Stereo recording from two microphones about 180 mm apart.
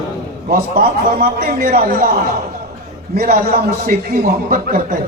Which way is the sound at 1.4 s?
55° right (ahead or behind).